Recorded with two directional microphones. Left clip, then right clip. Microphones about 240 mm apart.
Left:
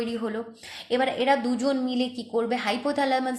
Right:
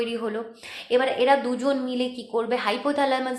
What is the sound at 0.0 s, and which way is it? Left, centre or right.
A woman's voice, left.